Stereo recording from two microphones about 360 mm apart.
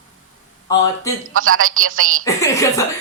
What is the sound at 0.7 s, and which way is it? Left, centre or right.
Speech, centre.